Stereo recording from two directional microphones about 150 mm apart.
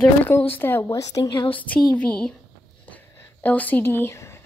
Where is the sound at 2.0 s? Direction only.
5° left (ahead or behind).